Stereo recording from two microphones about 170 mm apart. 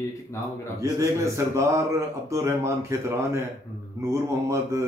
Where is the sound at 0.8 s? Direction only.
15° right (ahead or behind).